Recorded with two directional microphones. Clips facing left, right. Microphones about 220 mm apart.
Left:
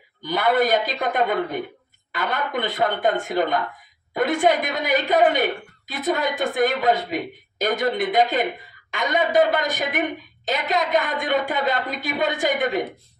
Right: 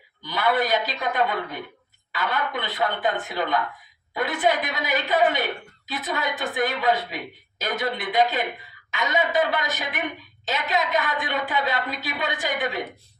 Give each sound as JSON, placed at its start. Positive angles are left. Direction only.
{"t": 0.2, "sound": "a woman's voice", "side_deg": 50}